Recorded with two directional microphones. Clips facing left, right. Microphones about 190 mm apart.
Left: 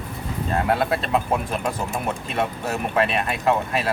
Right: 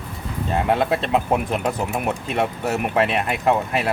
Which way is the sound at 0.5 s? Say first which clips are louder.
Right 2 dB; 20° right (ahead or behind).